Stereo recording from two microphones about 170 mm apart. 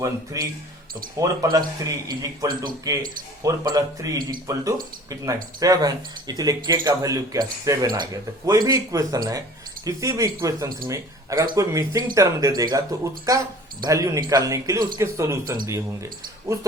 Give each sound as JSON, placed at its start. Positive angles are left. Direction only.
{"t": 0.3, "sound": "speech", "side_deg": -20}